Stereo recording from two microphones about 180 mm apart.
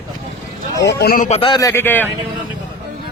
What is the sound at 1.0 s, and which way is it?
Speech, 50° left (ahead or behind).